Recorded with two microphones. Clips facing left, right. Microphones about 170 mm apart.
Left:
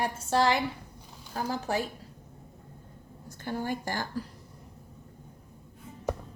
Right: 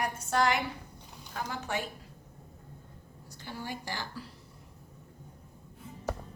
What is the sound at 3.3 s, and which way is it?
Speech, 50° left (ahead or behind).